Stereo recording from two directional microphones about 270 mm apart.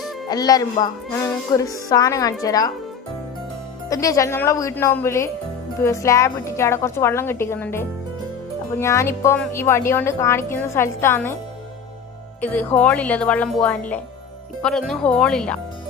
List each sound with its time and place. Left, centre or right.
0.3 s a woman's voice: centre
3.8 s a woman's voice: centre
12.4 s speech: centre